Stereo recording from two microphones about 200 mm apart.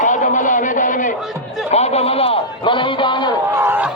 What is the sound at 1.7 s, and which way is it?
A man's voice, 30° left (ahead or behind).